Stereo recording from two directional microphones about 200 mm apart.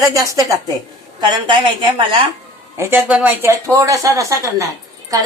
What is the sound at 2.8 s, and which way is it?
A woman's voice, 10° right (ahead or behind).